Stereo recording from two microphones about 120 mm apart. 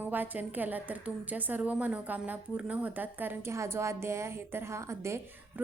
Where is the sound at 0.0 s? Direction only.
15° right (ahead or behind).